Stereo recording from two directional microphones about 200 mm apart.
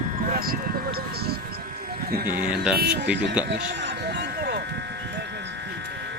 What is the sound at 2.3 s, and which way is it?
Speech, 5° right (ahead or behind).